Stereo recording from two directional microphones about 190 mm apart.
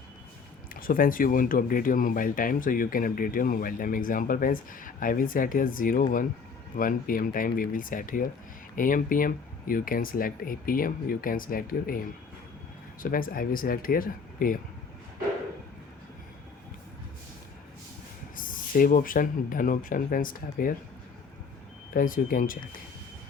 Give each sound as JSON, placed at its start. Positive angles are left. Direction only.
{"t": 0.7, "sound": "speech", "side_deg": 50}
{"t": 18.3, "sound": "speech", "side_deg": 45}
{"t": 21.9, "sound": "speech", "side_deg": 45}